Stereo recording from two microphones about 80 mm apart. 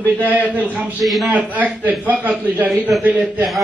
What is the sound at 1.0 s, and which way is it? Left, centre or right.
Speech, centre.